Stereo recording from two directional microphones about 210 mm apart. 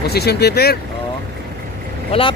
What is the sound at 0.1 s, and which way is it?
Speech, 50° left (ahead or behind).